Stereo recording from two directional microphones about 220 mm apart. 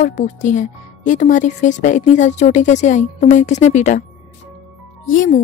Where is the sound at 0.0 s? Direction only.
35° left (ahead or behind).